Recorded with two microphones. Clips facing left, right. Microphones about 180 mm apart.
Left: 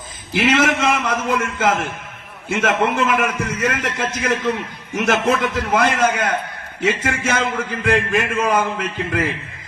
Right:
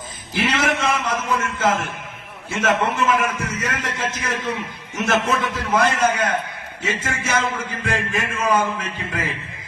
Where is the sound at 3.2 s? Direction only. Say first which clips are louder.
Left 3 dB; 50° left (ahead or behind).